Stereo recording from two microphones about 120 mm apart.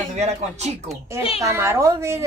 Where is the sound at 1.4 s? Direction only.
25° right (ahead or behind).